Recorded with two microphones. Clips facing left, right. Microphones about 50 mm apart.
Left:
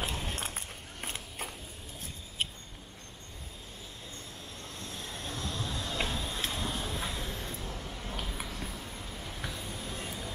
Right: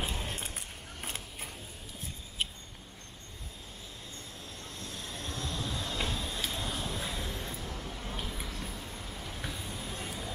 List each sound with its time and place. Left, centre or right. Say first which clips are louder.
0.1 s keys jangling: left 1 dB; centre
4.7 s train: even; centre
5.5 s music: even; centre
6.0 s vehicle: even; centre
6.5 s a sound: left 1 dB; centre
7.1 s a sound: even; centre
8.5 s vehicle: even; centre